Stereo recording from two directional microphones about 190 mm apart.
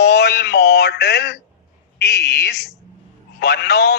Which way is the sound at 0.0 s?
60° left (ahead or behind).